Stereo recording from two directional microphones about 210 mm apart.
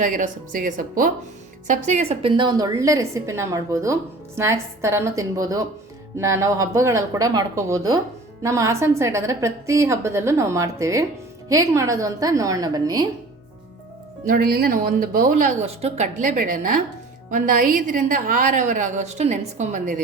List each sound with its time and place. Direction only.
0.0 s a woman's voice: 40° right (ahead or behind); by 13.1 s 20° right (ahead or behind)
14.3 s a woman's voice: 45° right (ahead or behind)